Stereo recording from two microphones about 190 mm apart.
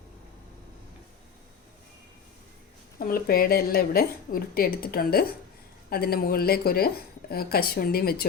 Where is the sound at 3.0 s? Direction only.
50° left (ahead or behind).